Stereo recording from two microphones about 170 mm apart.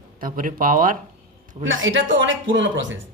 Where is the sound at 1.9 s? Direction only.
90° right.